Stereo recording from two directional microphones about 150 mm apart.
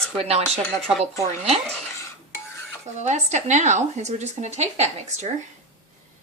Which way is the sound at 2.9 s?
50° right (ahead or behind).